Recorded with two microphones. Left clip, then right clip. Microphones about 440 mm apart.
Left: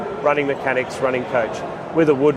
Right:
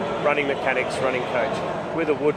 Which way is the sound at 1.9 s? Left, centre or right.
Left.